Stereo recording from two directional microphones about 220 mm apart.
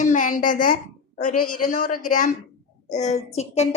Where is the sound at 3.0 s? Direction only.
30° left (ahead or behind).